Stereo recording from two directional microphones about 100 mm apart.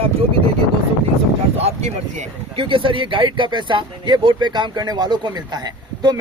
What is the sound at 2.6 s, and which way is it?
Speech, 60° right (ahead or behind).